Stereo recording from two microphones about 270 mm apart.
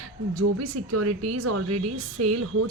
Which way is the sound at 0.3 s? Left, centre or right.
Right.